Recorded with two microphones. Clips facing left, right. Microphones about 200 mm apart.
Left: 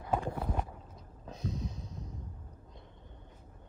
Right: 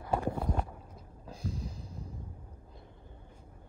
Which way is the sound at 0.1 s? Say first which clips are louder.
Right 2 dB; 10° right (ahead or behind).